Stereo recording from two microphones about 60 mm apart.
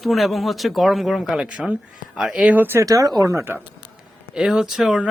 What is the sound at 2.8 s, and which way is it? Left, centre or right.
Speech, right.